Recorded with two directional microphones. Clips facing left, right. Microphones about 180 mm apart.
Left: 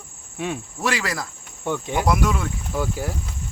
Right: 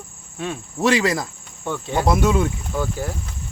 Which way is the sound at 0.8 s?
20° right (ahead or behind).